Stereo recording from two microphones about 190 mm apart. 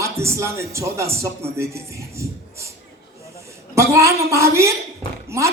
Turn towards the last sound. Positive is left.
turn(degrees=-15)  # may be behind; listen again after turning